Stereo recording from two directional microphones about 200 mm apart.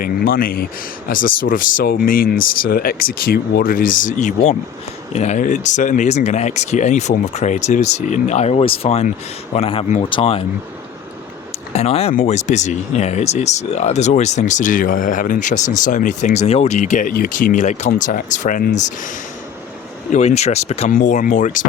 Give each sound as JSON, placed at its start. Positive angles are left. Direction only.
{"t": 0.0, "sound": "speech", "side_deg": 45}
{"t": 11.7, "sound": "speech", "side_deg": 30}
{"t": 20.1, "sound": "speech", "side_deg": 35}